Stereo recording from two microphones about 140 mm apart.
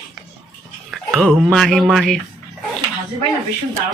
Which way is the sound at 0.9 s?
Centre (ahead or behind).